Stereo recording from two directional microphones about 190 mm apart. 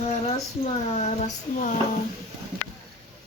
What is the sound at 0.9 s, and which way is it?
Child singing, 40° left (ahead or behind).